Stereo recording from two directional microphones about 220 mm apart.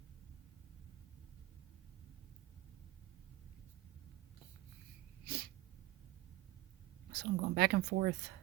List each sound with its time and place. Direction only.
5.2 s sneeze: 45° right (ahead or behind)
7.1 s a woman's voice: 50° right (ahead or behind)